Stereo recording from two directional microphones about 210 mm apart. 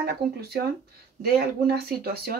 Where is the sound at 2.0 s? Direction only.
45° right (ahead or behind).